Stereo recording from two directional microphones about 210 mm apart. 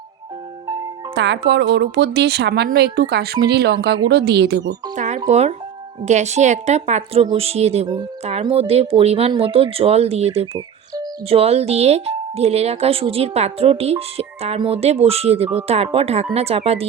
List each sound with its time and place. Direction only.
1.1 s speech: 55° right (ahead or behind)
4.9 s a woman's voice: 35° right (ahead or behind)